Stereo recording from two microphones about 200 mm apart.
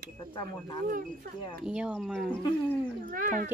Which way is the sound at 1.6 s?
5° right (ahead or behind).